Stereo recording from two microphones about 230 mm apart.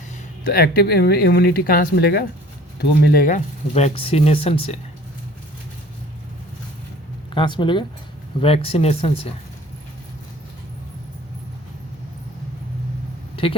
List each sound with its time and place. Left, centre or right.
0.5 s speech: left
7.3 s speech: left
13.3 s vehicle: left